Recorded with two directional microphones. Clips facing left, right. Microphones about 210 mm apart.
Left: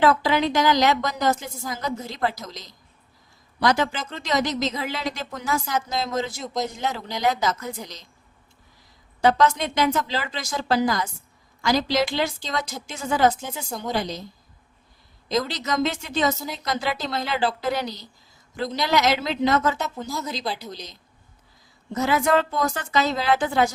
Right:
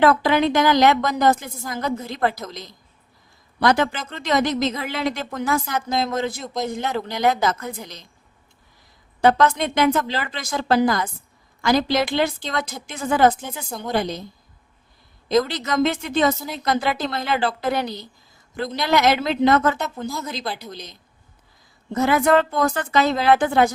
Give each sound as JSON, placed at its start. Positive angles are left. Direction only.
{"t": 0.0, "sound": "speech", "side_deg": -55}
{"t": 9.2, "sound": "speech", "side_deg": -55}
{"t": 13.7, "sound": "a woman's voice", "side_deg": 0}
{"t": 13.9, "sound": "speech", "side_deg": -55}
{"t": 15.3, "sound": "speech", "side_deg": -55}